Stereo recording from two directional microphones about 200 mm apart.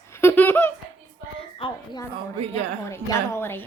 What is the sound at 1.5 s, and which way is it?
Speech, 25° left (ahead or behind).